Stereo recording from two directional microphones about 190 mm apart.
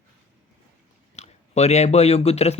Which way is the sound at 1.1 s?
35° left (ahead or behind).